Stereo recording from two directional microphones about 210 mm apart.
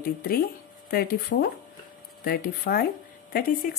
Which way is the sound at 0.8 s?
45° left (ahead or behind).